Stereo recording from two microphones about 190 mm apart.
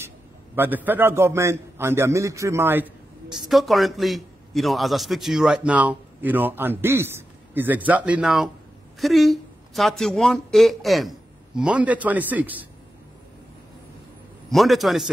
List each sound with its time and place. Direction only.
0.6 s a man's voice: 10° right (ahead or behind)
14.5 s a man's voice: centre (ahead or behind)